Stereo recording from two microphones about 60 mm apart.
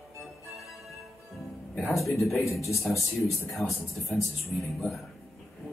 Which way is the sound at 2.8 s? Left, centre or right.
Centre.